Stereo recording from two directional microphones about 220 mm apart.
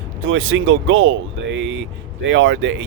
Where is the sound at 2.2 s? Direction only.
55° right (ahead or behind).